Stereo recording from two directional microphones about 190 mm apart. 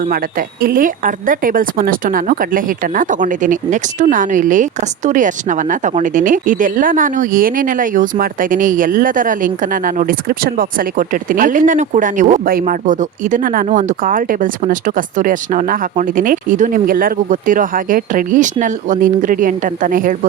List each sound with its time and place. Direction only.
0.1 s a woman's voice: 50° right (ahead or behind)